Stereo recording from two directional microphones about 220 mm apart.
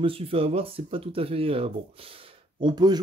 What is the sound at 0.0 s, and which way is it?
Speech, 25° right (ahead or behind).